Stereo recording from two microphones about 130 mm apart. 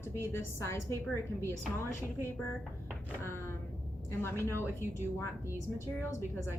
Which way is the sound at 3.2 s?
20° left (ahead or behind).